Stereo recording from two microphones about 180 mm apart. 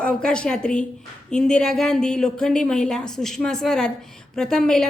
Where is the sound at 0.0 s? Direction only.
5° left (ahead or behind).